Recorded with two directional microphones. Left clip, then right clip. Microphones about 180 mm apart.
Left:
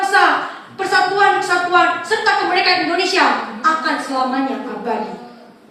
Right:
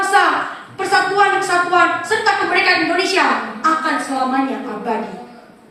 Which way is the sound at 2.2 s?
15° right (ahead or behind).